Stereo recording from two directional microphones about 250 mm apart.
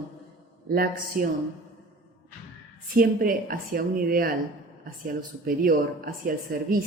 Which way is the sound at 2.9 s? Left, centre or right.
Right.